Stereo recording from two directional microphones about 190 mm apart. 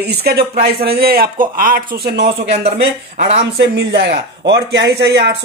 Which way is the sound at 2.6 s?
40° right (ahead or behind).